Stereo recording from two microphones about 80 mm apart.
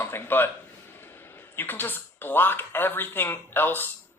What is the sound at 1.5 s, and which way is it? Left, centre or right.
Speech, left.